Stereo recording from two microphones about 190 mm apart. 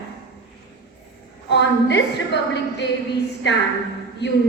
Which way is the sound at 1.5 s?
65° left (ahead or behind).